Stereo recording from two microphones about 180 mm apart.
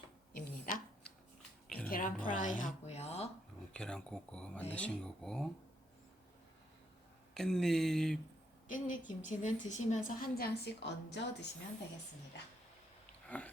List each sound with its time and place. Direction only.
0.3 s a sound: 55° left (ahead or behind)
1.9 s music: 50° left (ahead or behind)
2.2 s a sound: 45° left (ahead or behind)
3.7 s speech: 5° left (ahead or behind)
7.3 s speech: centre (ahead or behind)
8.6 s a woman's voice: 45° left (ahead or behind); by 11.4 s 75° left (ahead or behind)
13.2 s sniff: 10° left (ahead or behind)